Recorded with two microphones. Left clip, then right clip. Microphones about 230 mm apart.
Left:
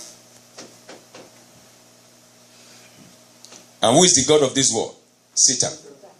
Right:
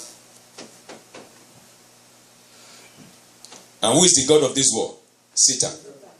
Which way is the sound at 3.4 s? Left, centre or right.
Left.